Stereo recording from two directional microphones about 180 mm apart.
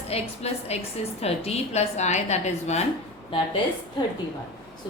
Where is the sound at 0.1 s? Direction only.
35° left (ahead or behind).